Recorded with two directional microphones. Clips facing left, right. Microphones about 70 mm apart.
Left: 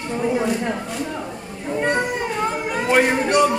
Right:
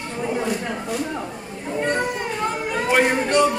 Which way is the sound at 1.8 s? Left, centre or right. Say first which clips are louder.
Left 2 dB; centre.